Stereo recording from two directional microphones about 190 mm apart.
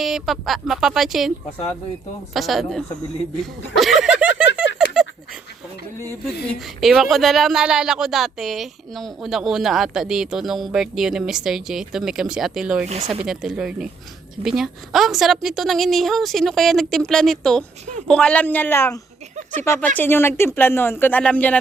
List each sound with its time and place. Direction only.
0.0 s speech: centre (ahead or behind)
2.3 s speech: centre (ahead or behind)
3.8 s a sound: centre (ahead or behind)
6.7 s speech: centre (ahead or behind)